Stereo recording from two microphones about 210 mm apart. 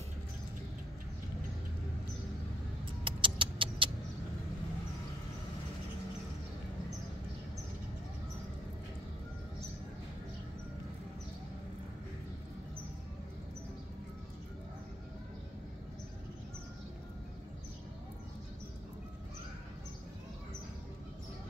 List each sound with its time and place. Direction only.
3.0 s rodents: 25° right (ahead or behind)